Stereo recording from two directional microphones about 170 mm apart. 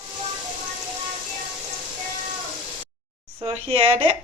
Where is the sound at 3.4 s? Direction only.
30° right (ahead or behind).